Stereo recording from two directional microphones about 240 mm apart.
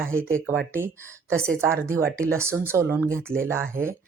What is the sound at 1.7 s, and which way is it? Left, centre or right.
Speech, centre.